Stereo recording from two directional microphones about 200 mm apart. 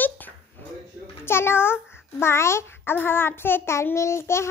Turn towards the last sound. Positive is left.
turn(degrees=15)  # may be behind; listen again after turning